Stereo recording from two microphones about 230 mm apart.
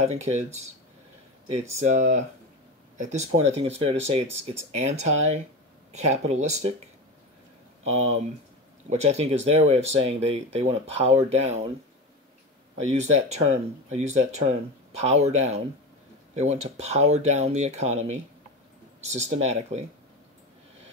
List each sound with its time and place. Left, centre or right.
0.2 s speech: right
1.5 s speech: right
7.8 s speech: right
13.1 s speech: right